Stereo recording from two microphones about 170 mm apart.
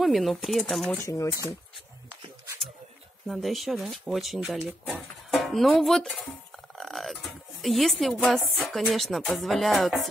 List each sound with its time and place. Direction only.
0.0 s speech: centre (ahead or behind)
1.0 s speech: 20° left (ahead or behind)
3.3 s speech: centre (ahead or behind)